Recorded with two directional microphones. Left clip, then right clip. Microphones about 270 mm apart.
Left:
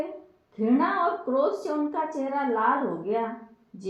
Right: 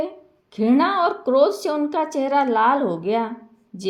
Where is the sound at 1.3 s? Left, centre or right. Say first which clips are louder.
Right 10 dB; right.